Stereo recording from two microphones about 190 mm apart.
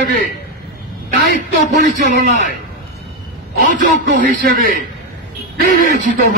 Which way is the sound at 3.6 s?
45° right (ahead or behind).